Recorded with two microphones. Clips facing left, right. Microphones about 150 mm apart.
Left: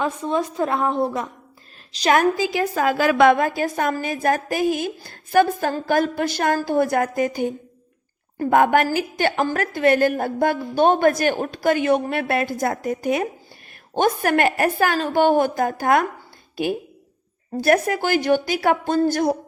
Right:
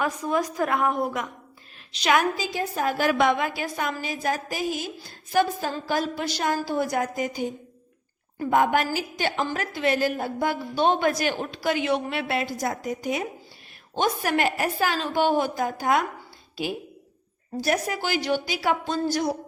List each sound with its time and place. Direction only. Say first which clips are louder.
0.0 s a woman's voice: left 3 dB; 25° left (ahead or behind); by 2.5 s 50° left (ahead or behind)
2.5 s a woman's voice: left 6 dB; 90° left
3.3 s a woman's voice: left 6 dB; 45° left (ahead or behind)
17.6 s a woman's voice: left 7 dB; 55° left (ahead or behind)